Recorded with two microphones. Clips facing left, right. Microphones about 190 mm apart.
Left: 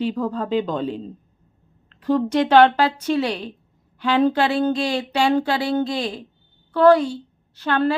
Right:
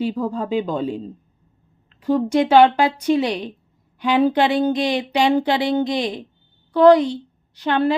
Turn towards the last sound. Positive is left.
turn(degrees=-15)  # may be behind; listen again after turning